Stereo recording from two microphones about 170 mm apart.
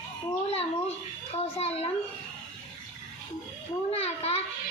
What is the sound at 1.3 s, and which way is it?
Speech, 40° left (ahead or behind).